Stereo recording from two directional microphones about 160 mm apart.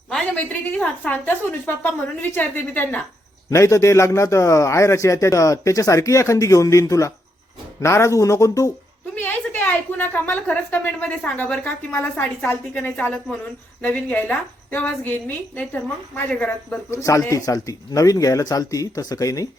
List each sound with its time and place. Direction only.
0.1 s a woman's voice: 5° left (ahead or behind); by 19.5 s 20° left (ahead or behind)